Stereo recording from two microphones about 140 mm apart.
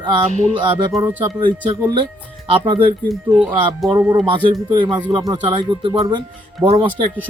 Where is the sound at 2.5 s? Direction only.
40° right (ahead or behind).